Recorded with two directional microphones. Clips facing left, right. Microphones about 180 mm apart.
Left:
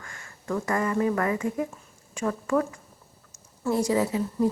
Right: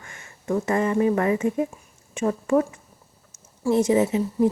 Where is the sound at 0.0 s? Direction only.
20° right (ahead or behind).